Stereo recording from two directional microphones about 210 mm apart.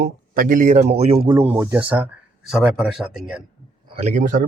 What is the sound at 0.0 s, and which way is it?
Speech, 40° right (ahead or behind).